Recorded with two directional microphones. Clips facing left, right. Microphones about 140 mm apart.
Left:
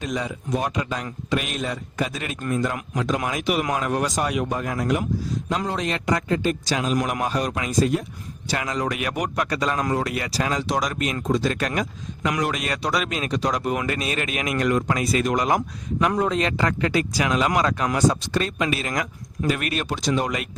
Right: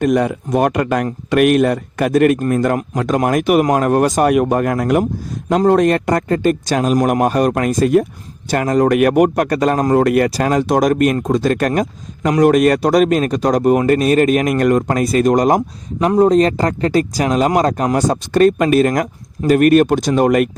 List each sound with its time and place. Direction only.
0.0 s speech: 60° right (ahead or behind)